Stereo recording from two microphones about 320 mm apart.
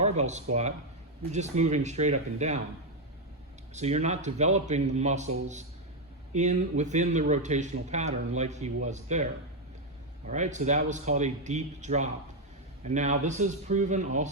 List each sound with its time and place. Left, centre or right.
0.0 s speech: right
3.8 s speech: right
6.3 s speech: right